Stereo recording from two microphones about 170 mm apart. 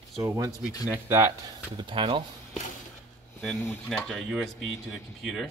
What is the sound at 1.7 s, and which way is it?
Speech, 30° right (ahead or behind).